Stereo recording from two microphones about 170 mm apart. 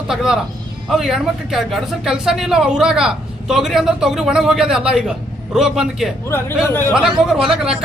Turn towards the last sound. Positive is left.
turn(degrees=-5)  # may be behind; listen again after turning